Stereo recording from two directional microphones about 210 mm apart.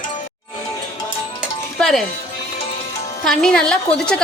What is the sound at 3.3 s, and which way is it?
Sizzle, 5° left (ahead or behind).